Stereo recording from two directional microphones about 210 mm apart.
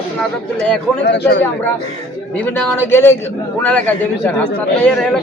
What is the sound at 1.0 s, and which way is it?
Speech, 55° left (ahead or behind).